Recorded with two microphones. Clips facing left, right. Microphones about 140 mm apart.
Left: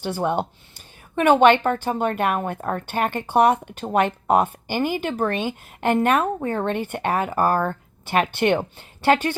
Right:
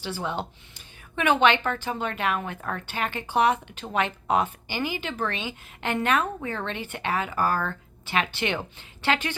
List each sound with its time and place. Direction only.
0.0 s speech: 55° left (ahead or behind)